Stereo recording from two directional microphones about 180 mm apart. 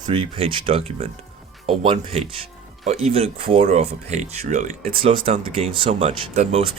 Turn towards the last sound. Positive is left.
turn(degrees=-35)  # may be behind; listen again after turning